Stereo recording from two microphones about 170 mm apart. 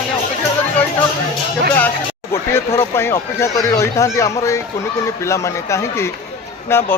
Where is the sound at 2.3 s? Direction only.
15° left (ahead or behind).